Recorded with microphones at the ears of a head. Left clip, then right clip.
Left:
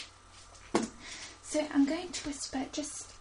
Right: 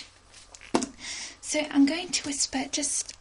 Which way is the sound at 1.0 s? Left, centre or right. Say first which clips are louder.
Right 8 dB; right.